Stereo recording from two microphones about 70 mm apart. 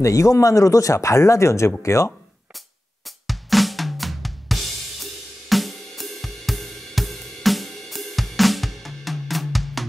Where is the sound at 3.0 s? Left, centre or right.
Centre.